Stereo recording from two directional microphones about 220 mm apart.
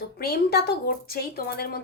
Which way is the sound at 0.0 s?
45° left (ahead or behind).